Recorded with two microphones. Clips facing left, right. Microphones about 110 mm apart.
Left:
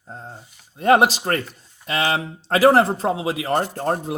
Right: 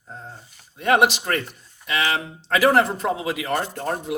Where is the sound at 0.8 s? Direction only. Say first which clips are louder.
Left 3 dB; 35° left (ahead or behind).